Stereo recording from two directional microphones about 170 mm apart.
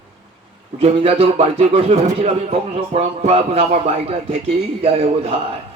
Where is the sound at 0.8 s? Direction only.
35° right (ahead or behind).